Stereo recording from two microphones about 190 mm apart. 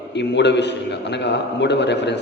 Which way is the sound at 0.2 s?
65° left (ahead or behind).